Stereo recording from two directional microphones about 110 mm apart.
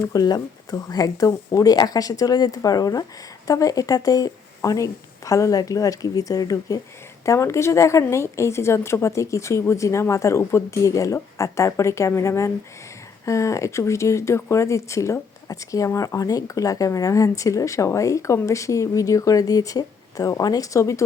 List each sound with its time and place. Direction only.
0.1 s speech: 35° left (ahead or behind)